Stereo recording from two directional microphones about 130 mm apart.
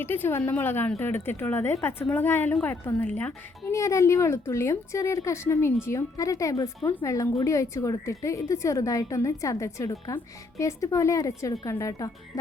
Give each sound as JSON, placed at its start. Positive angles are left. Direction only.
{"t": 0.0, "sound": "a woman's voice", "side_deg": 15}
{"t": 3.7, "sound": "a woman's voice", "side_deg": 25}